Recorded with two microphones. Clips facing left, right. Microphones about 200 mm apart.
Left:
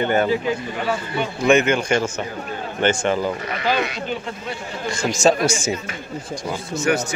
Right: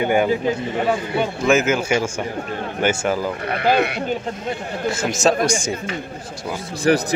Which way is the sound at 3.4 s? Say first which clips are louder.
Right 4 dB; 55° right (ahead or behind).